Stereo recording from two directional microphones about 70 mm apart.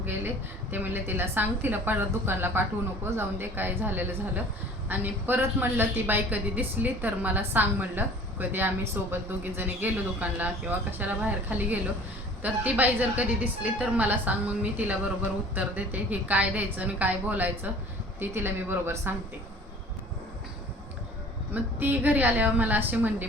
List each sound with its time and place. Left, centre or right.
0.7 s a woman's voice: right
21.5 s a woman's voice: right